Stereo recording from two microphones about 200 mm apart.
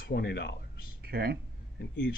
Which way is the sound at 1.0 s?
50° right (ahead or behind).